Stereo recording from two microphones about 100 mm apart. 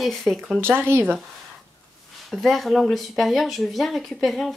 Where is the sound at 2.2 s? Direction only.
Centre (ahead or behind).